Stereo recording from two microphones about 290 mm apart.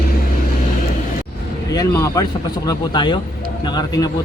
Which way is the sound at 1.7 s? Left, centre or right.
Centre.